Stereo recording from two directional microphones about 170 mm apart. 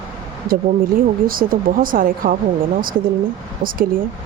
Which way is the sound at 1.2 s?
55° right (ahead or behind).